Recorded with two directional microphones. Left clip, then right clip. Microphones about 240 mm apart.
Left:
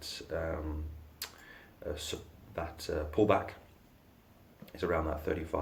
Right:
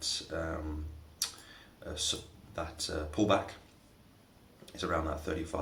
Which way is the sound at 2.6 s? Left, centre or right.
Left.